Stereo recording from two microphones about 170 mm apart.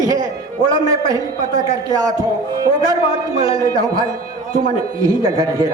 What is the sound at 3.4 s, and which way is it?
Speech, 20° right (ahead or behind).